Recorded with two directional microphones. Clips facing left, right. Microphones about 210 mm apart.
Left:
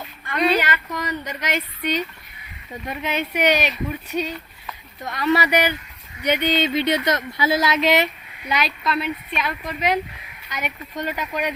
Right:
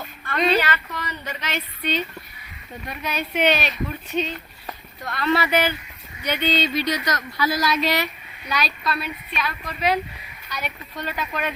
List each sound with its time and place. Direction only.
0.3 s speech: 15° left (ahead or behind)
3.3 s speech: 15° left (ahead or behind)